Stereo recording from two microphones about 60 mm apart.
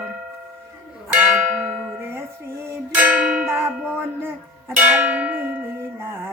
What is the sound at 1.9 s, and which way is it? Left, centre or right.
Music, right.